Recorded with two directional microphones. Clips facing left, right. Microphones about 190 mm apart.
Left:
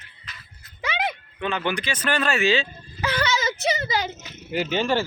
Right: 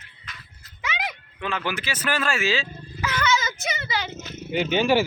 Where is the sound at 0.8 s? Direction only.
30° left (ahead or behind).